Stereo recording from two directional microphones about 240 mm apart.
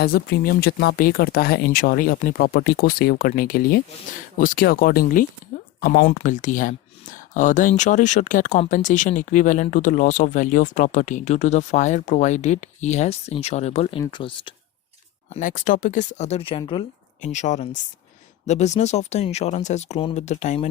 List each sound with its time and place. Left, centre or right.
0.0 s speech: left
15.3 s speech: left
17.2 s speech: left